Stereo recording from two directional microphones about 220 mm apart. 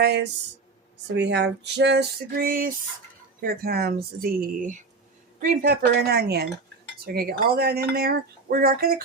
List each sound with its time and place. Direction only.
0.0 s speech: 50° right (ahead or behind)